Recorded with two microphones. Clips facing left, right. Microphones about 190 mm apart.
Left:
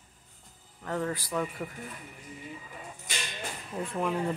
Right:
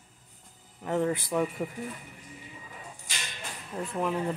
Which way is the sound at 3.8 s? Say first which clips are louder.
Right 1 dB; centre (ahead or behind).